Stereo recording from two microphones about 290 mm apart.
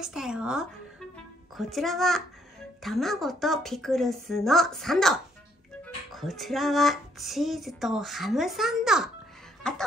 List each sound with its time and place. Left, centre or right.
0.0 s speech: centre
1.1 s music: centre
2.8 s speech: centre
9.6 s a sound: centre